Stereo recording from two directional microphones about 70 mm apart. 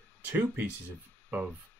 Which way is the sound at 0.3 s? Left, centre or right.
Right.